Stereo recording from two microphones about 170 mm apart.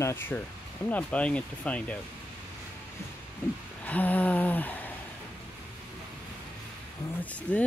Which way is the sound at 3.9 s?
10° left (ahead or behind).